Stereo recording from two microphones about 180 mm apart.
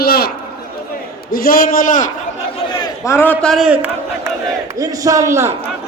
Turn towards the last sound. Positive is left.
turn(degrees=-15)  # may be behind; listen again after turning